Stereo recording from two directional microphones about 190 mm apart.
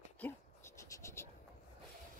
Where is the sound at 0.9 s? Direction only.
15° left (ahead or behind).